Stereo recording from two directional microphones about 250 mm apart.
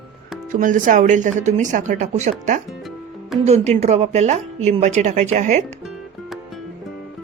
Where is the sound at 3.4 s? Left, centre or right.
Right.